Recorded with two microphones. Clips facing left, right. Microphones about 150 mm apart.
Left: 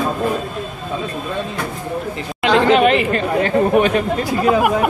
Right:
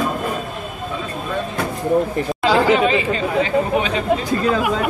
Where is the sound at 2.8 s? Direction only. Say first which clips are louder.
Left 3 dB; 70° left (ahead or behind).